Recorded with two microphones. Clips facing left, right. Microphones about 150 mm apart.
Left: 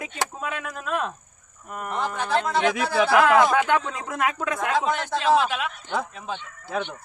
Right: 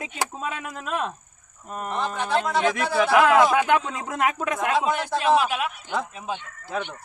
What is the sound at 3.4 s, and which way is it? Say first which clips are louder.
Speech: right 1 dB; 10° right (ahead or behind).